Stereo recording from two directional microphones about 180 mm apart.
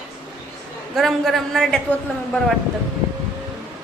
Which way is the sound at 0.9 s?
Centre (ahead or behind).